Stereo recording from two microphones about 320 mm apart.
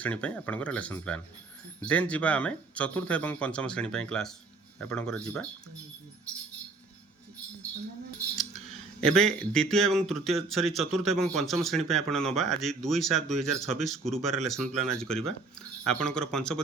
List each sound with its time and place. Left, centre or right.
0.0 s speech: centre
9.0 s speech: centre